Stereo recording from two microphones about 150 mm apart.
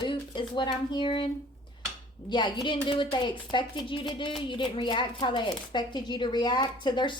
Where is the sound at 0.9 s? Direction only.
30° left (ahead or behind).